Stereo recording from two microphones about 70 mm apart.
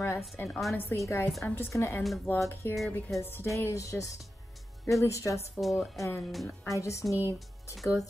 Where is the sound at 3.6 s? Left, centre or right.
Left.